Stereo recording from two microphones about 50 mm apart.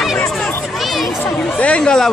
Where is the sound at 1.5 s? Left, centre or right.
Left.